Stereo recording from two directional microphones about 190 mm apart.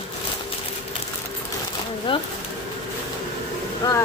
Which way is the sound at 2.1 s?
25° left (ahead or behind).